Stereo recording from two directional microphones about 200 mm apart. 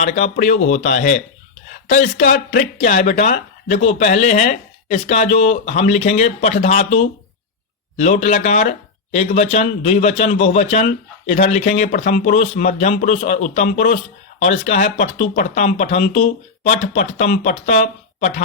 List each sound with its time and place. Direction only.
0.0 s a man's voice: 35° left (ahead or behind)